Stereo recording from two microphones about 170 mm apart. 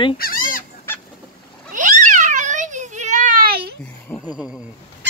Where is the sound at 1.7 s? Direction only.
45° right (ahead or behind); by 3.7 s 65° right (ahead or behind).